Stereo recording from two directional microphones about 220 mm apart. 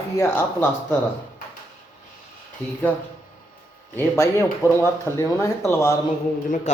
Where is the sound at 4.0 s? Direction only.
10° left (ahead or behind).